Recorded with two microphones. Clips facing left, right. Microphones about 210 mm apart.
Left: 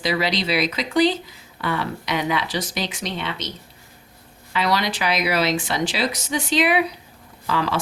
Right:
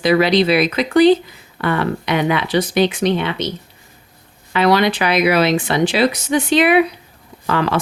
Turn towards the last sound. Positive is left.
turn(degrees=-60)  # may be behind; listen again after turning